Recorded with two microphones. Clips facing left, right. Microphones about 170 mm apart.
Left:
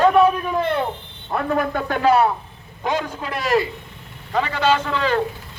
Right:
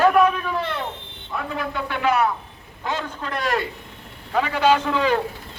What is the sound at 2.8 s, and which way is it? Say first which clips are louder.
Speech: left 4 dB; 10° left (ahead or behind).